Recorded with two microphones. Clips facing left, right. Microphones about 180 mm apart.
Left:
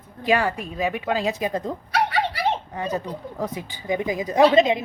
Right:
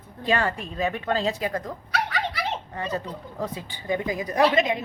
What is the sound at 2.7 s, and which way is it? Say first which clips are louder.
A woman's voice: left 3 dB; 15° left (ahead or behind).